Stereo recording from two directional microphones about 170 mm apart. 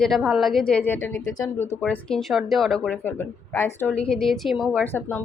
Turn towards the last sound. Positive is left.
turn(degrees=15)  # may be behind; listen again after turning